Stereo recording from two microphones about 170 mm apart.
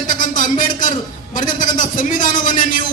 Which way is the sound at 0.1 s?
50° left (ahead or behind).